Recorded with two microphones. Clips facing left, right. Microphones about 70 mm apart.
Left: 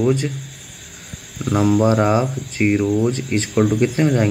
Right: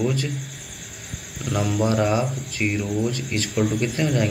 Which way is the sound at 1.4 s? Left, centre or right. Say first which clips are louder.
Left 7 dB; left.